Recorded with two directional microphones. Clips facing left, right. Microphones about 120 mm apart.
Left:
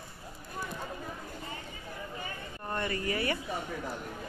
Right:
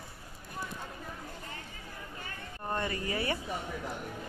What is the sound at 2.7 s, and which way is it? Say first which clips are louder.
Speech: left 1 dB; 15° right (ahead or behind).